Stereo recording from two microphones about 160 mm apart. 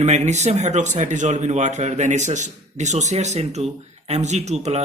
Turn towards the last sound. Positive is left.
turn(degrees=-45)  # may be behind; listen again after turning